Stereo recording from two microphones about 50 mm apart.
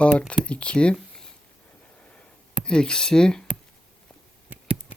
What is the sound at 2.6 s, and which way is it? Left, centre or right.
Speech, centre.